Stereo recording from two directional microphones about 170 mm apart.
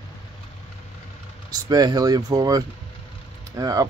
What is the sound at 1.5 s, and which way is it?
Speech, 20° right (ahead or behind).